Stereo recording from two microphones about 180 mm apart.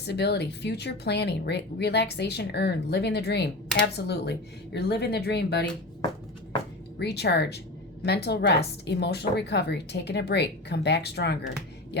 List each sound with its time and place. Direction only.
0.0 s speech: 65° left (ahead or behind)
7.0 s speech: 65° left (ahead or behind)